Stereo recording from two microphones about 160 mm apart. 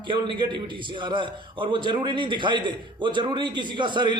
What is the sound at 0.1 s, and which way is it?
A man's voice, 30° right (ahead or behind).